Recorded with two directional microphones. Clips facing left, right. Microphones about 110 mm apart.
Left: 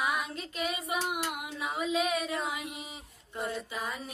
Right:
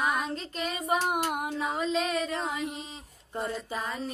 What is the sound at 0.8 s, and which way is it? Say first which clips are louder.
Child singing: right 5 dB; 45° right (ahead or behind).